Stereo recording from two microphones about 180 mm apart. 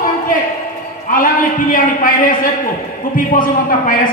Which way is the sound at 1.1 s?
50° left (ahead or behind).